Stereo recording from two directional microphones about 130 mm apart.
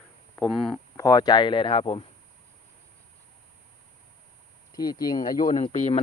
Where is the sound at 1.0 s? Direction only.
30° left (ahead or behind).